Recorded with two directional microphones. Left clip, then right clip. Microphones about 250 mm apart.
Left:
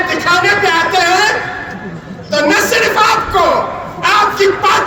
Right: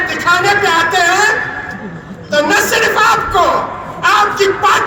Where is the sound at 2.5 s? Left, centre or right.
Centre.